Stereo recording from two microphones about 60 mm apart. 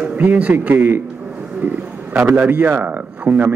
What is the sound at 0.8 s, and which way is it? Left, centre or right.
Speech, right.